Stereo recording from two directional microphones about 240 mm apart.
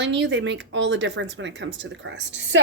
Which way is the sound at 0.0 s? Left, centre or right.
Right.